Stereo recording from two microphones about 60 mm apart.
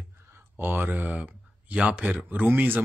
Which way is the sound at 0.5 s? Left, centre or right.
Right.